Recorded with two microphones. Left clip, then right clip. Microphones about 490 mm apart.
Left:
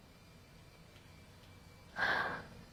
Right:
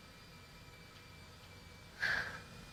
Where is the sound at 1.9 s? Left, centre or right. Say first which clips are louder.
Left 2 dB; left.